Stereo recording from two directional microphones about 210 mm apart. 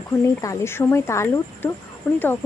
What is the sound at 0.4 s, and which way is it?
A woman's voice, 15° left (ahead or behind).